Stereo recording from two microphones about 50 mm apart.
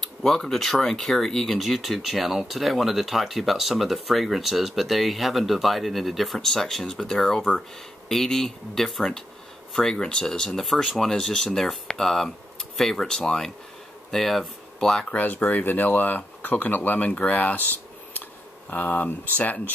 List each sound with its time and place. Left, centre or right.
0.0 s speech: centre
15.0 s speech: left
18.7 s speech: left